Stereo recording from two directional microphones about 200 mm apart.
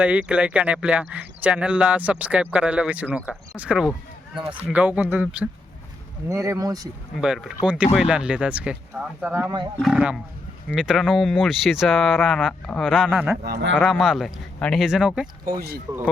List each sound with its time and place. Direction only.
0.0 s speech: 5° right (ahead or behind)
7.2 s speech: centre (ahead or behind)
13.4 s a man's voice: 55° right (ahead or behind)
13.7 s speech: centre (ahead or behind)
15.9 s speech: 15° right (ahead or behind)